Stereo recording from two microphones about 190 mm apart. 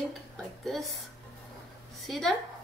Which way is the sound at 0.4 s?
Centre (ahead or behind).